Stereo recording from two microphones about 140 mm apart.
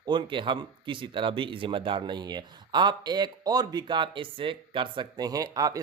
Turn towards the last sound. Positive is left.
turn(degrees=-25)  # may be behind; listen again after turning